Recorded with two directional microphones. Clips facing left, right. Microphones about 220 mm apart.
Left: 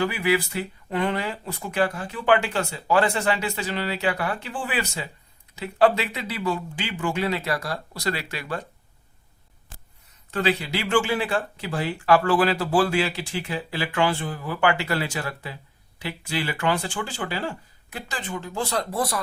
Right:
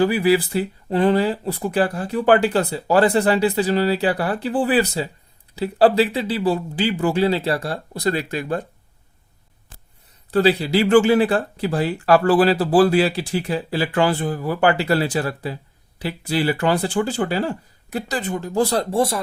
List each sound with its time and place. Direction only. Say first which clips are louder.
0.0 s speech: right 6 dB; 35° right (ahead or behind)
7.9 s speech: right 9 dB; 45° right (ahead or behind)
10.3 s speech: right 8 dB; 35° right (ahead or behind)